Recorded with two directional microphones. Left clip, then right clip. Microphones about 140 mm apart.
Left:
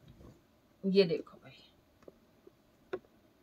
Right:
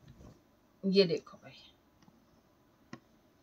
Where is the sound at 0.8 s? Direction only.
Centre (ahead or behind).